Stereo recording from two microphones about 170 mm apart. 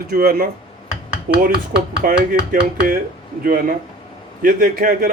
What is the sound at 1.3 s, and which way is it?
A man's voice, 55° right (ahead or behind).